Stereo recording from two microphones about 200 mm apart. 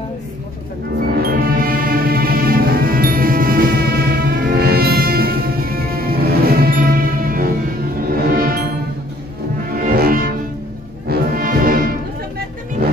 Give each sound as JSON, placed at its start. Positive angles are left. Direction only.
{"t": 1.0, "sound": "music", "side_deg": -50}
{"t": 9.8, "sound": "music", "side_deg": -45}